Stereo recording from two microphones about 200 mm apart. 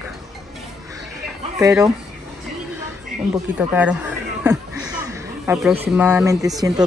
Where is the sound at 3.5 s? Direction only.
5° right (ahead or behind).